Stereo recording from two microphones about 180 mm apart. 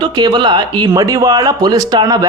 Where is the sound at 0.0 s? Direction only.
25° right (ahead or behind).